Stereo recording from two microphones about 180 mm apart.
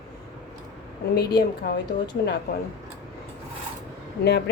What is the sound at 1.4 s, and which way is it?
Speech, 60° left (ahead or behind).